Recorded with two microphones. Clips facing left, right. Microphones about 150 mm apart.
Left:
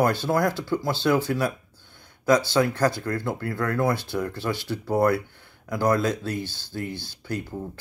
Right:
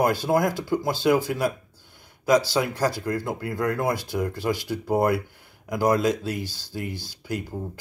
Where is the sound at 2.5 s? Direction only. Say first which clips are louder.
Left 2 dB; 10° right (ahead or behind).